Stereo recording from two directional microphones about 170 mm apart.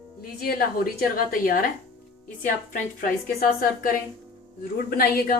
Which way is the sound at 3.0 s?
55° left (ahead or behind).